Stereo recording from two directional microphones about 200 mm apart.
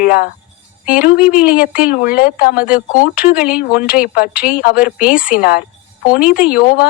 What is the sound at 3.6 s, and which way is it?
Speech, 50° left (ahead or behind).